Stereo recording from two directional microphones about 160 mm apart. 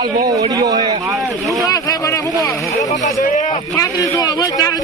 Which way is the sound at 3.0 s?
50° left (ahead or behind).